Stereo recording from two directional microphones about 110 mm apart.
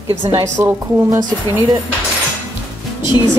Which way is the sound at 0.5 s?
20° right (ahead or behind).